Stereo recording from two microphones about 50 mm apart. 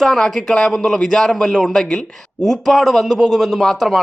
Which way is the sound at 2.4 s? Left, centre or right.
Centre.